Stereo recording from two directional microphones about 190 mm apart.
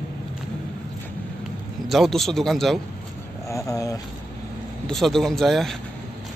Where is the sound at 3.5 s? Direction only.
15° left (ahead or behind).